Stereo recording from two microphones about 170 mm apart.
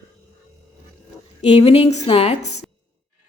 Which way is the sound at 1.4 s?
40° left (ahead or behind).